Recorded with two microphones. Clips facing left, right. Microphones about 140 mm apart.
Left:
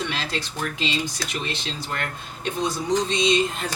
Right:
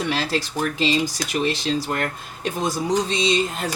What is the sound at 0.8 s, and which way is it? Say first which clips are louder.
Speech: right 7 dB; 35° right (ahead or behind).